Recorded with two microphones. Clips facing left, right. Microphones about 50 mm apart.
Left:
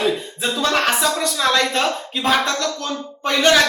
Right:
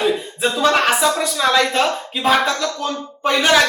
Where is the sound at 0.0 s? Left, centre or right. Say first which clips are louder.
Right 2 dB; centre.